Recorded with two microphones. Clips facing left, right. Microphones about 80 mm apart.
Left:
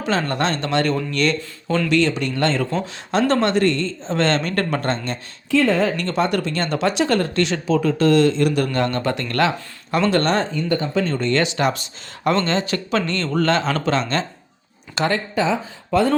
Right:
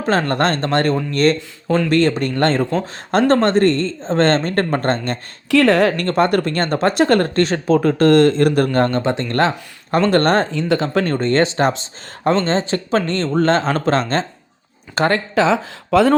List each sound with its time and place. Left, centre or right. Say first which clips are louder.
0.0 s speech: right 4 dB; right
5.5 s speech: right 4 dB; right
6.0 s speech: right 4 dB; right
9.0 s speech: right 3 dB; right
10.5 s speech: right 3 dB; right
11.2 s speech: right 5 dB; right
15.4 s speech: right 5 dB; right